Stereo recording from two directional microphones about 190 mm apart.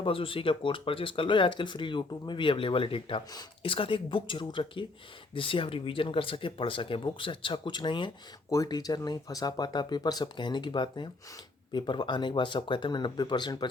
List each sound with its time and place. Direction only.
0.0 s speech: 30° left (ahead or behind)